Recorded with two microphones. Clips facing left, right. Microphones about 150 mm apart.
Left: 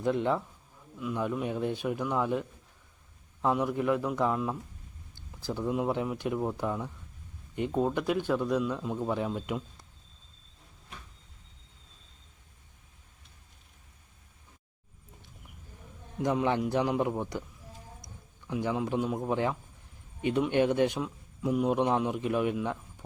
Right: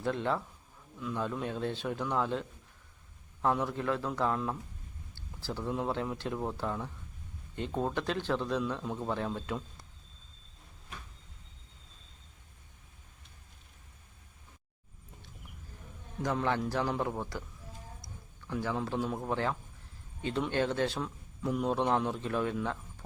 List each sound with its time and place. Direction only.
0.0 s a man's voice: 15° left (ahead or behind)
16.2 s a man's voice: 15° left (ahead or behind)